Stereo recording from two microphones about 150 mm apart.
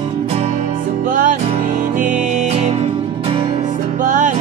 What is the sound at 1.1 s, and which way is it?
Music, 65° right (ahead or behind).